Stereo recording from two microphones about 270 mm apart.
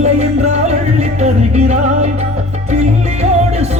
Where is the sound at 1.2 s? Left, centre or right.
Right.